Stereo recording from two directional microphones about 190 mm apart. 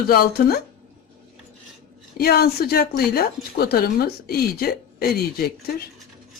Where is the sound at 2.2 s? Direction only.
55° left (ahead or behind).